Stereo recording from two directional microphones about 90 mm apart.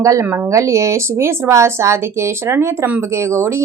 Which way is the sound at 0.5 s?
35° right (ahead or behind).